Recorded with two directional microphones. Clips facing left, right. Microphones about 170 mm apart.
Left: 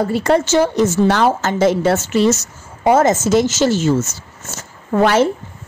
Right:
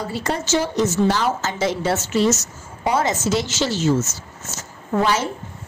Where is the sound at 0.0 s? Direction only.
55° left (ahead or behind).